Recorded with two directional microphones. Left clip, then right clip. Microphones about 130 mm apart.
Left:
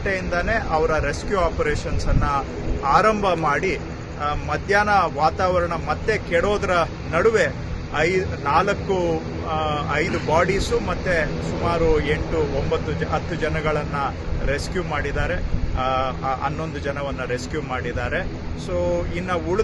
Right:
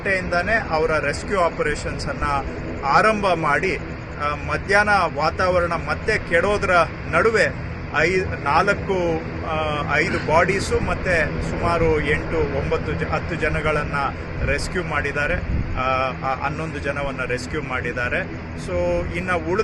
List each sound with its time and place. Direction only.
0.1 s speech: 15° left (ahead or behind)
2.8 s speech: 15° left (ahead or behind)